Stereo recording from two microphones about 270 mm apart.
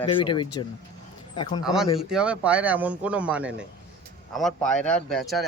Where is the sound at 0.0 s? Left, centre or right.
Centre.